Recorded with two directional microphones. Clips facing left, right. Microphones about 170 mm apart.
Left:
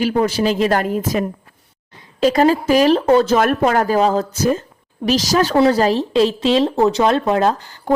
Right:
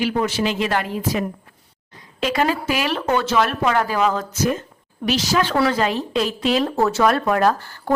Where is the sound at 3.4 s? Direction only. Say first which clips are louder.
Left 4 dB; 45° left (ahead or behind).